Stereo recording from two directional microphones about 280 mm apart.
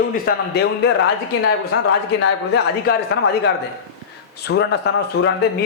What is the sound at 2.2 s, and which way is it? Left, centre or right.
Speech, left.